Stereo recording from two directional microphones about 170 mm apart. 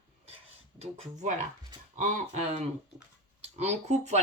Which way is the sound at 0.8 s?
45° right (ahead or behind).